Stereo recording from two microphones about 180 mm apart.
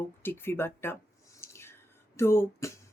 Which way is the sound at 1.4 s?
15° left (ahead or behind).